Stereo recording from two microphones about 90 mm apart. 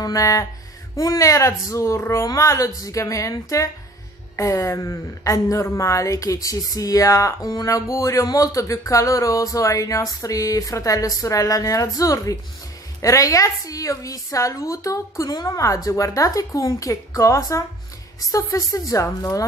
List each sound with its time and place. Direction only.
0.0 s speech: 40° left (ahead or behind)